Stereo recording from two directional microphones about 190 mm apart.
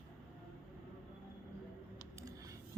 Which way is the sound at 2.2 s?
20° right (ahead or behind).